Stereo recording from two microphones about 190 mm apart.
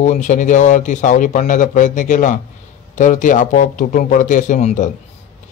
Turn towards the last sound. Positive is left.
turn(degrees=40)  # may be behind; listen again after turning